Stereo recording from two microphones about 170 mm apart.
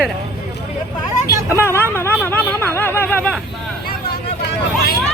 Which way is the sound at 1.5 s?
15° left (ahead or behind).